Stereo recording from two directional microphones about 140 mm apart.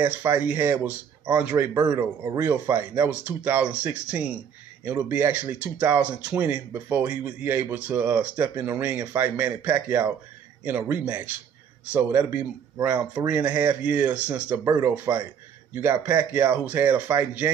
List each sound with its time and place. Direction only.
0.0 s speech: 15° right (ahead or behind)